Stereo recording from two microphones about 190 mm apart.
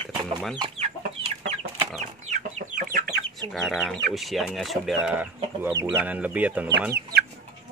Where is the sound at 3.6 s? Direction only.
Centre (ahead or behind).